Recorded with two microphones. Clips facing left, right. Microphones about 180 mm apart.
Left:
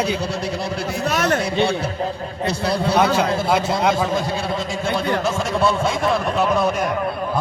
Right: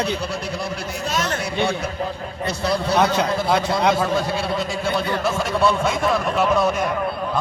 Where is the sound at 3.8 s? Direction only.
5° left (ahead or behind).